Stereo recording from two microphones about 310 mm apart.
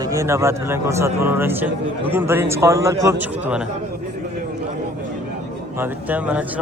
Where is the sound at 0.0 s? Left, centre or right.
Centre.